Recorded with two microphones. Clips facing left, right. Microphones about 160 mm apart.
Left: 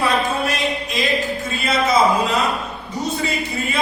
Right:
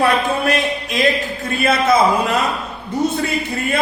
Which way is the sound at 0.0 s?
60° right (ahead or behind).